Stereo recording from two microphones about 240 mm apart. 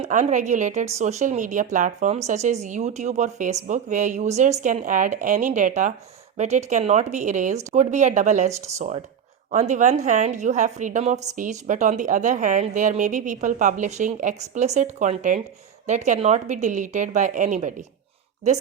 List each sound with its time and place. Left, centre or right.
0.0 s a woman's voice: right